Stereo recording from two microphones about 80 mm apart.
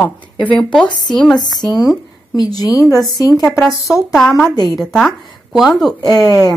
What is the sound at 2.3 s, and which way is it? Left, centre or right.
A woman's voice, left.